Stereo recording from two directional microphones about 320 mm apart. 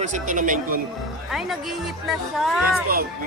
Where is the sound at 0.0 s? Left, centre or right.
Right.